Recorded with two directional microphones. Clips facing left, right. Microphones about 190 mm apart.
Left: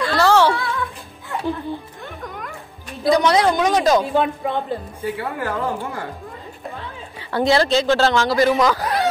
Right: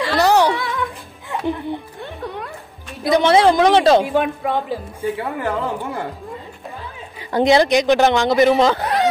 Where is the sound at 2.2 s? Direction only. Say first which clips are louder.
Right 4 dB; 30° right (ahead or behind).